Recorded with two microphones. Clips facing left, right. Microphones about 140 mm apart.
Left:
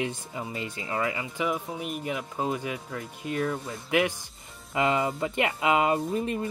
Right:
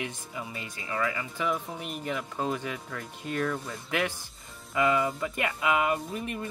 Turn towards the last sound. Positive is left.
turn(degrees=30)  # may be behind; listen again after turning